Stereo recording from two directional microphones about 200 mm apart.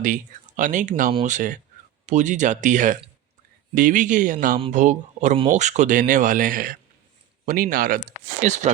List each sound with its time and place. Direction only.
0.0 s speech: 40° right (ahead or behind)